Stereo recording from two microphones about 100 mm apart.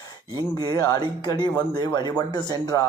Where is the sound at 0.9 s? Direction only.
45° left (ahead or behind).